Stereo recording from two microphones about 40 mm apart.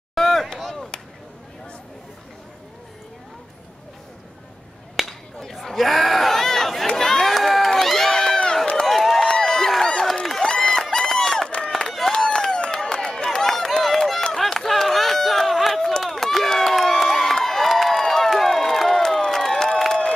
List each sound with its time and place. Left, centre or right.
0.1 s chop: centre
5.0 s a sound: centre
5.4 s chatter: centre
7.0 s run: centre
9.3 s a sound: centre
11.4 s run: left
12.1 s a sound: centre
13.8 s run: centre
16.0 s crowd: centre